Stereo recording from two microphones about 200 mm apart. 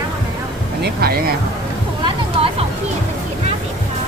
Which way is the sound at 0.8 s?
50° right (ahead or behind).